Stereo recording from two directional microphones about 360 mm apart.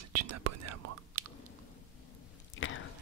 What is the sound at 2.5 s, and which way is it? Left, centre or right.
Chewing, left.